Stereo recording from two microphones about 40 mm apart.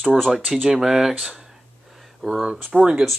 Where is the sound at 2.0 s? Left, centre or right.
Centre.